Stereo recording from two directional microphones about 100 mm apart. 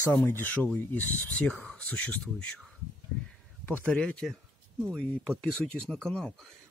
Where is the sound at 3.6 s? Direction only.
15° left (ahead or behind).